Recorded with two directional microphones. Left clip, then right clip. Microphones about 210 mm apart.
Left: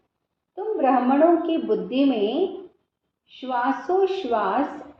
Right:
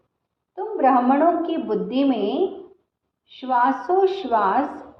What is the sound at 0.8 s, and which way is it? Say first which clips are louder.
A woman's voice: right 2 dB; 20° right (ahead or behind).